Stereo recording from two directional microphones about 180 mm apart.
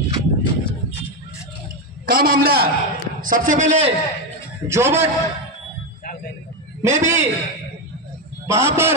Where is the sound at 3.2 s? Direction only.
50° right (ahead or behind).